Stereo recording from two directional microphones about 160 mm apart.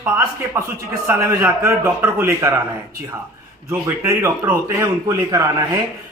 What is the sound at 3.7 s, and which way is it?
A man's voice, 15° right (ahead or behind).